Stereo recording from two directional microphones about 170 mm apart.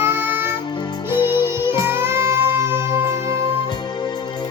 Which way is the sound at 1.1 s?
25° left (ahead or behind).